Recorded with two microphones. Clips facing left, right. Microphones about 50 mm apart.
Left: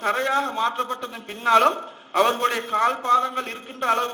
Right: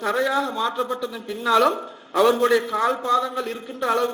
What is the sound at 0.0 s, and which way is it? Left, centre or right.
A man's voice, left.